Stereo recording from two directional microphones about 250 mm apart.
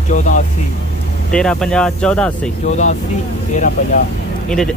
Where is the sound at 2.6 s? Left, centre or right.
Left.